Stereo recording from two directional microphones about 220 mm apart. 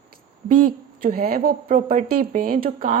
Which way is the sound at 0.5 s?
40° right (ahead or behind).